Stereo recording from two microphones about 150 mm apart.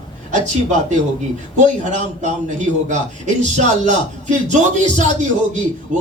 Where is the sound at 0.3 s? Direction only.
55° right (ahead or behind).